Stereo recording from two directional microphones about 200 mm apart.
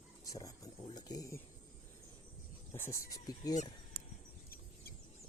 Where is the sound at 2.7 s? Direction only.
15° left (ahead or behind).